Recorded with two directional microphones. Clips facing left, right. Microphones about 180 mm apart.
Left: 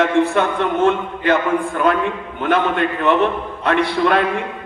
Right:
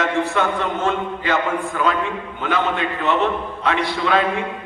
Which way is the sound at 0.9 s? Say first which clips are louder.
Left 4 dB; 55° left (ahead or behind).